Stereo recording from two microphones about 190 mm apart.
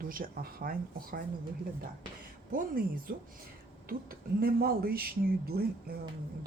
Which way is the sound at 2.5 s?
50° right (ahead or behind).